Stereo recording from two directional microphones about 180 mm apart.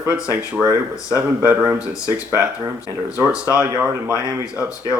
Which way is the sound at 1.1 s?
10° right (ahead or behind).